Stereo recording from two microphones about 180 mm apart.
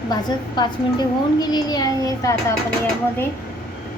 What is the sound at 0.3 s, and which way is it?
A child's voice, 25° left (ahead or behind).